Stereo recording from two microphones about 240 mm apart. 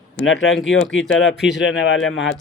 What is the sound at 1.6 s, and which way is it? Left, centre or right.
Speech, left.